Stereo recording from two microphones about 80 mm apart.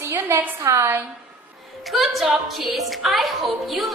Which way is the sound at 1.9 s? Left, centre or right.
Centre.